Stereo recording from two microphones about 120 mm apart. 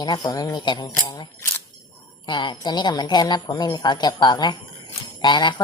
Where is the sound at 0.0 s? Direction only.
35° left (ahead or behind).